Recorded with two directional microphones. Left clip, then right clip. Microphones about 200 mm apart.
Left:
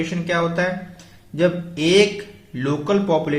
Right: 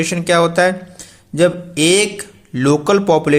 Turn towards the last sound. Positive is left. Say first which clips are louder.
# right 7 dB
turn(degrees=-55)  # may be behind; listen again after turning